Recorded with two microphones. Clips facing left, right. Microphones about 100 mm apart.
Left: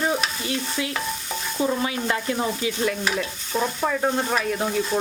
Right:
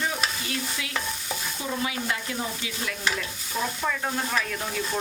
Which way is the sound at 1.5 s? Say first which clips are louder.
Left 8 dB; 40° left (ahead or behind).